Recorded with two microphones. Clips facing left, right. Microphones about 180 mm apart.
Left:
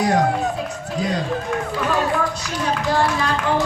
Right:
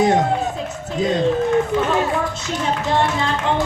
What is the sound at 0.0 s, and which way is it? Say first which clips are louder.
A child's voice: right 2 dB; 25° right (ahead or behind).